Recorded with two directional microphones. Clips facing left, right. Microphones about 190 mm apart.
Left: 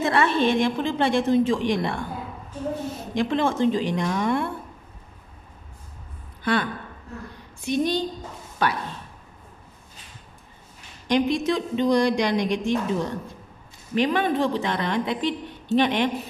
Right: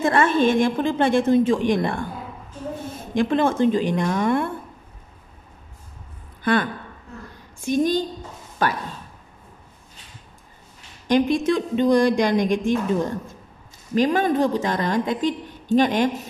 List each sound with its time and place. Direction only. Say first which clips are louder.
0.0 s a woman's voice: right 3 dB; 45° right (ahead or behind)
3.2 s a woman's voice: right 3 dB; 50° right (ahead or behind)
7.6 s a woman's voice: right 3 dB; 45° right (ahead or behind)
11.1 s a woman's voice: right 3 dB; 50° right (ahead or behind)